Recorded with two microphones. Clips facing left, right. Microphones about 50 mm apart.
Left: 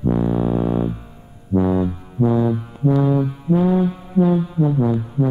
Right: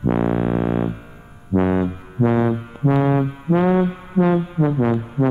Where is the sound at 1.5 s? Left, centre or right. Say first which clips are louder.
Even; right.